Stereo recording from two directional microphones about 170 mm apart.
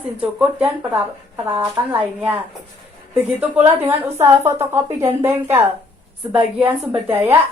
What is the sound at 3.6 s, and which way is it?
A woman's voice, 15° right (ahead or behind).